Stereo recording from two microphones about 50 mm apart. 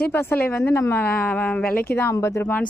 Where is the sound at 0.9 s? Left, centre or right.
Left.